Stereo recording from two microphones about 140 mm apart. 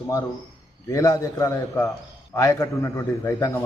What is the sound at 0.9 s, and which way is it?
A man's voice, 25° left (ahead or behind).